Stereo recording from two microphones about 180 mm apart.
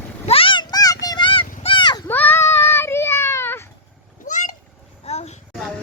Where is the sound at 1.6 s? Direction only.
25° left (ahead or behind).